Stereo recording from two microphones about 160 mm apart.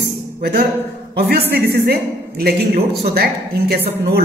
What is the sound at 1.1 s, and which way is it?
Speech, 90° right.